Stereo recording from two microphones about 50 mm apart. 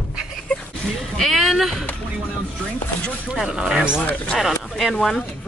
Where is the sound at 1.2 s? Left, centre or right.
Centre.